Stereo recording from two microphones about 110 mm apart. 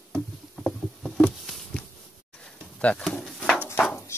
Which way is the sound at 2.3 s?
10° left (ahead or behind).